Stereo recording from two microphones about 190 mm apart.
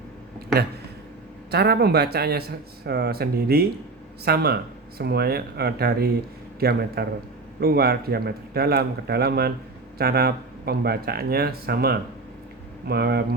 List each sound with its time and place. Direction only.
1.5 s speech: 60° right (ahead or behind)